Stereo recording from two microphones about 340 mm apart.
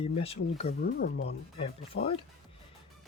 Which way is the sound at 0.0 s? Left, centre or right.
Centre.